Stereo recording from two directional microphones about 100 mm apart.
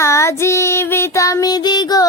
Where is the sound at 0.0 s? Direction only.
30° left (ahead or behind).